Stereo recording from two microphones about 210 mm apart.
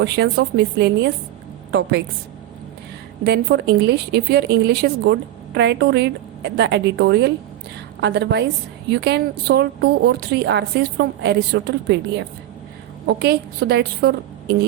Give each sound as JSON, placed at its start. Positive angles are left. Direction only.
{"t": 0.0, "sound": "speech", "side_deg": -55}
{"t": 3.2, "sound": "speech", "side_deg": -55}